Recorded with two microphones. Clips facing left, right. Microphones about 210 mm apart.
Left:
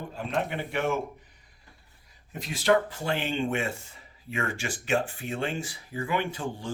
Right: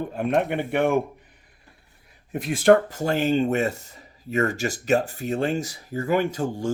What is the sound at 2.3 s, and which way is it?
Speech, 55° right (ahead or behind).